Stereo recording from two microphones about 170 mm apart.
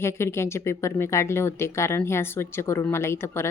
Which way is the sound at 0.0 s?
15° left (ahead or behind).